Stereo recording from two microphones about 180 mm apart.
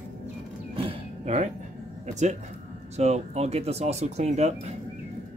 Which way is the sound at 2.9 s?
35° right (ahead or behind).